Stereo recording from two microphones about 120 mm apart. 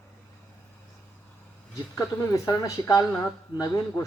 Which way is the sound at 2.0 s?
25° left (ahead or behind).